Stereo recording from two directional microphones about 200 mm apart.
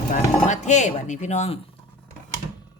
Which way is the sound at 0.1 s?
35° left (ahead or behind).